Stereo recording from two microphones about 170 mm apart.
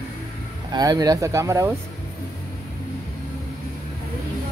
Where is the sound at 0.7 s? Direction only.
25° right (ahead or behind).